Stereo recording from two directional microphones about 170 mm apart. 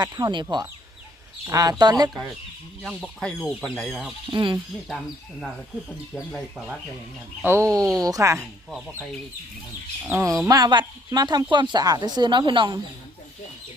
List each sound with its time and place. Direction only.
0.0 s speech: 25° right (ahead or behind)
1.5 s speech: 20° right (ahead or behind)
2.8 s speech: 5° right (ahead or behind)
4.3 s speech: 25° right (ahead or behind)
4.9 s speech: centre (ahead or behind)
7.4 s speech: 15° right (ahead or behind)
10.0 s speech: 15° right (ahead or behind)